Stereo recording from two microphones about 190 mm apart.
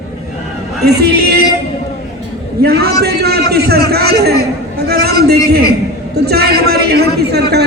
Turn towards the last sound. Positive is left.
turn(degrees=-60)  # may be behind; listen again after turning